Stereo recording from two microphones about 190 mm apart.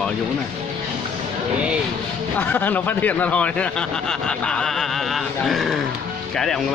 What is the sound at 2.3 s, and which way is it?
Speech, 10° left (ahead or behind).